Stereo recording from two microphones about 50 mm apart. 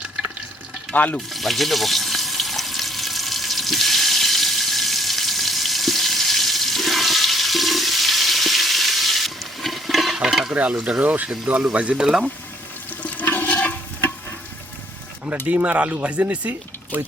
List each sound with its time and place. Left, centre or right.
0.9 s speech: left
1.3 s frying: centre
10.2 s stir: centre
10.5 s speech: right
12.0 s speech: centre
13.0 s toilet flush: left
13.3 s stir: left
15.4 s speech: right